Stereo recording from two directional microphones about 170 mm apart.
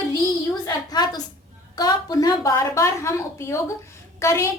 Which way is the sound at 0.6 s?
25° left (ahead or behind).